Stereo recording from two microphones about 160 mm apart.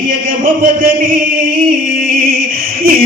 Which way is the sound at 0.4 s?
60° right (ahead or behind).